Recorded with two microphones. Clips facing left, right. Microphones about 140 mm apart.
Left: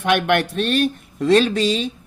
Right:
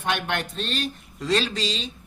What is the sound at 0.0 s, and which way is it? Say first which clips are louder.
Speech: left 9 dB; 80° left.